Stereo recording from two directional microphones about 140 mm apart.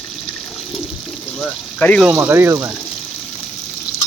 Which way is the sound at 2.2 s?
20° right (ahead or behind).